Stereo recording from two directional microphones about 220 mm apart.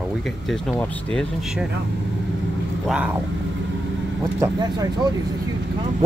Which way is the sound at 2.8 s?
5° right (ahead or behind).